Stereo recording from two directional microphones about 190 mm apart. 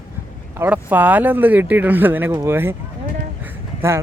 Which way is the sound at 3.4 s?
15° right (ahead or behind).